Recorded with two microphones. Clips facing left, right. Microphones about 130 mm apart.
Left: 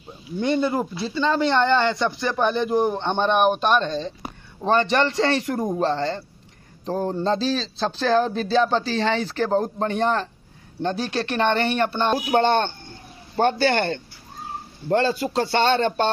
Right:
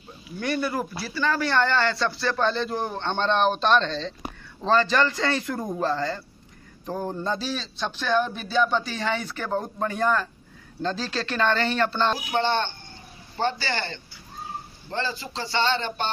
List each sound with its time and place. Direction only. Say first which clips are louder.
0.4 s a man's voice: left 5 dB; 20° left (ahead or behind)
12.1 s a man's voice: left 5 dB; 50° left (ahead or behind)